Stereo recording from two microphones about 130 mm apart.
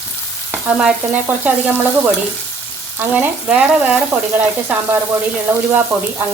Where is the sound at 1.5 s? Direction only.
15° right (ahead or behind).